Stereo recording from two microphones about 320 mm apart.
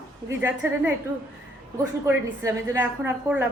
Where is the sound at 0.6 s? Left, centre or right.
Centre.